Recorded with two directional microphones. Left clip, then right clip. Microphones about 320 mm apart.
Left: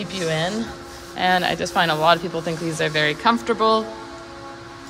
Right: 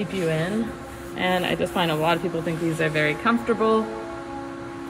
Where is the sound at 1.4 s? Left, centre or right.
Left.